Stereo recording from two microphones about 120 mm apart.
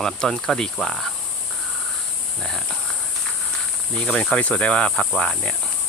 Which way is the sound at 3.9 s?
5° left (ahead or behind).